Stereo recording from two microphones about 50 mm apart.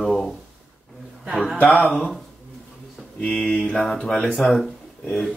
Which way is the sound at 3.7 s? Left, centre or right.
Centre.